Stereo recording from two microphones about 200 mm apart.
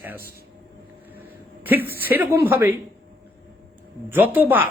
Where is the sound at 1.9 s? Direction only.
10° right (ahead or behind).